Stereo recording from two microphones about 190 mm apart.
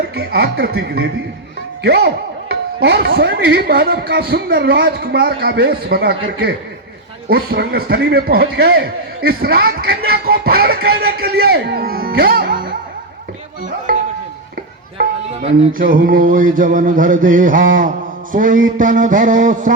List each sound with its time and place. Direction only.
0.2 s a man's voice: 55° right (ahead or behind)
14.9 s a man's voice: 55° right (ahead or behind)